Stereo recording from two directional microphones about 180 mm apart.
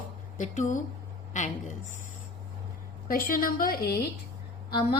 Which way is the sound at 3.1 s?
55° left (ahead or behind).